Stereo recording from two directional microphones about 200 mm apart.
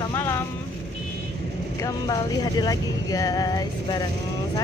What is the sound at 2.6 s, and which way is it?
Speech, 20° left (ahead or behind).